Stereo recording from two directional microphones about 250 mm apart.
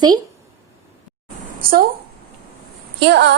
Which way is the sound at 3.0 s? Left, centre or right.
Right.